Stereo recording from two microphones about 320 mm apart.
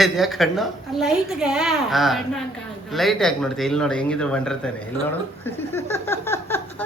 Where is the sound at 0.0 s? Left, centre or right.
Centre.